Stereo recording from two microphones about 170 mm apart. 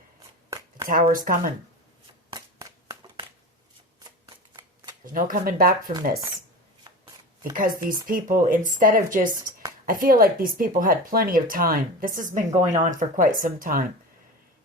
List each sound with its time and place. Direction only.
1.0 s speech: 50° right (ahead or behind)
2.3 s a sound: 25° right (ahead or behind)
4.5 s shuffling cards: 25° right (ahead or behind)
5.1 s speech: 55° right (ahead or behind)
7.5 s speech: 55° right (ahead or behind)